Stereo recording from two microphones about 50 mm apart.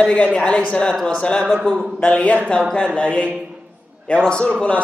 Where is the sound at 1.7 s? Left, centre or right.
Left.